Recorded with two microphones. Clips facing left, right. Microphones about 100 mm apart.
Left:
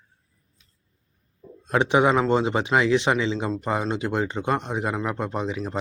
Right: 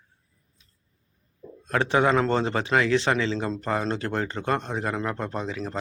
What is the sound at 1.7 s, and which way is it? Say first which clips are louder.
A man's voice: left 2 dB; 20° left (ahead or behind).